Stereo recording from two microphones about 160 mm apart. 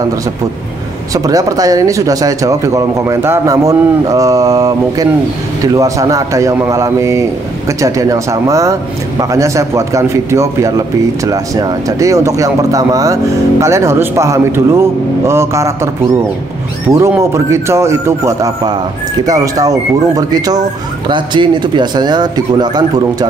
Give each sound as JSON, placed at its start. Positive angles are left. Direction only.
{"t": 1.1, "sound": "speech", "side_deg": -20}
{"t": 16.9, "sound": "speech", "side_deg": -15}